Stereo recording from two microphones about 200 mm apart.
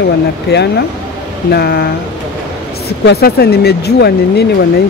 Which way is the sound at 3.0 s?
50° left (ahead or behind).